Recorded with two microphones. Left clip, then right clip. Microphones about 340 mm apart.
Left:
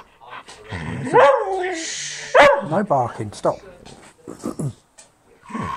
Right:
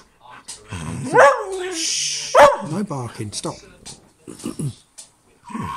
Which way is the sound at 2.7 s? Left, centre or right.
Centre.